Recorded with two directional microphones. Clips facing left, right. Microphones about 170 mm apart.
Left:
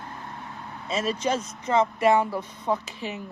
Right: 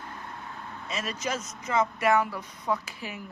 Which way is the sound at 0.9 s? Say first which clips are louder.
Left 7 dB; 30° left (ahead or behind).